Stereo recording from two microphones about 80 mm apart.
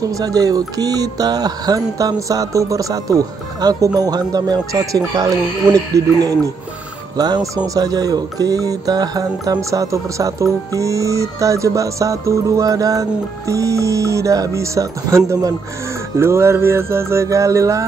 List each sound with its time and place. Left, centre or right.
0.0 s music: right
7.2 s music: right
13.5 s speech: right